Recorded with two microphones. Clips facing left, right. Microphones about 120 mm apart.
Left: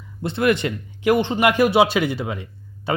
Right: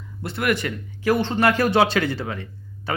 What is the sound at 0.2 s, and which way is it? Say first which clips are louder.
Speech: left 4 dB; 25° left (ahead or behind).